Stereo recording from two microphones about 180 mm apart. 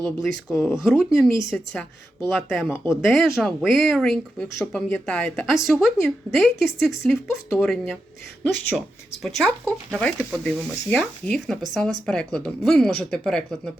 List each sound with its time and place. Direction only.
0.0 s speech: centre (ahead or behind)
0.5 s speech: 15° left (ahead or behind)
0.8 s speech: centre (ahead or behind)
2.6 s speech: 15° left (ahead or behind)
2.9 s speech: centre (ahead or behind)
9.2 s speech: 5° left (ahead or behind)